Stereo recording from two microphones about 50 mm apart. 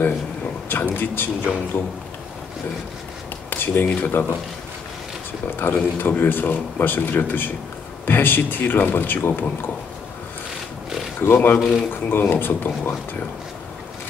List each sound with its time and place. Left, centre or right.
0.7 s speech: left
3.4 s speech: left
5.6 s speech: left
11.3 s speech: left